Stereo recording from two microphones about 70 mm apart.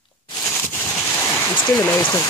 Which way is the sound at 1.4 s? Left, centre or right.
Left.